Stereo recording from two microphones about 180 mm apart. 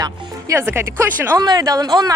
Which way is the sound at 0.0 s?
15° right (ahead or behind).